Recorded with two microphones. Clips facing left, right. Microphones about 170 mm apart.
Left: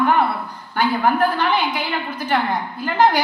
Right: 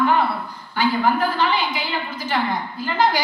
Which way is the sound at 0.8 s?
60° left (ahead or behind).